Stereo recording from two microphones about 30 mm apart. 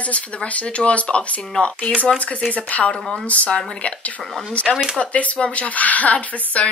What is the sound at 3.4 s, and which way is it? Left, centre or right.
Speech, left.